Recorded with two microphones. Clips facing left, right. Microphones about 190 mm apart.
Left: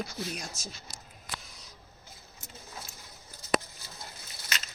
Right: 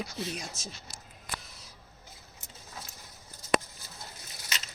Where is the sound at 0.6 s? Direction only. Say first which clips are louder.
Even; 25° right (ahead or behind).